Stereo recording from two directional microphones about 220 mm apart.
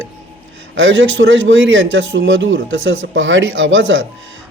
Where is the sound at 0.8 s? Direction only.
60° right (ahead or behind).